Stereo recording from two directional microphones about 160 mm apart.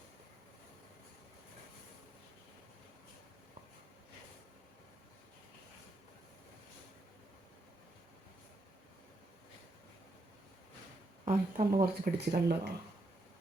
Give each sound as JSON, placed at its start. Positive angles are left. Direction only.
{"t": 11.3, "sound": "speech", "side_deg": -60}